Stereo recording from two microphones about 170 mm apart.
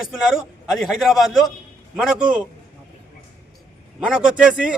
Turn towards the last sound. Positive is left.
turn(degrees=-5)  # may be behind; listen again after turning